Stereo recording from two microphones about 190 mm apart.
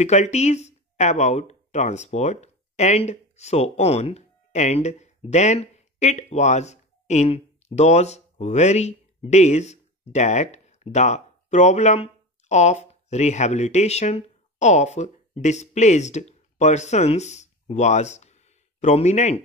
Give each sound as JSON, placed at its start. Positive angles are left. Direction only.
{"t": 0.0, "sound": "speech", "side_deg": 35}